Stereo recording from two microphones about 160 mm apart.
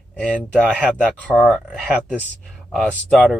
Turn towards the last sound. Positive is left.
turn(degrees=0)  # may be behind; listen again after turning